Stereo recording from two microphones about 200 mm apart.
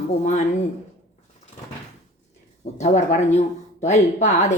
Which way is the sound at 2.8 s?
35° left (ahead or behind).